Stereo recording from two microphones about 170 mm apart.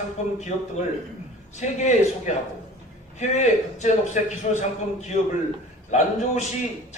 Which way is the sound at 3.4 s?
45° left (ahead or behind).